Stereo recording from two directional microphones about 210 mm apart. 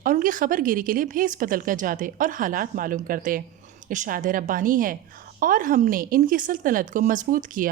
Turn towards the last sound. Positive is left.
turn(degrees=-40)  # may be behind; listen again after turning